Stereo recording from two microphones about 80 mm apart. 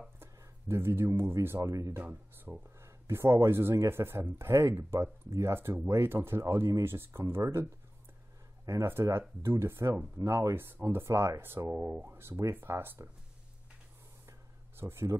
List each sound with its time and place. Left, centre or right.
0.2 s speech: right
2.0 s speech: right
8.8 s speech: right
14.8 s speech: right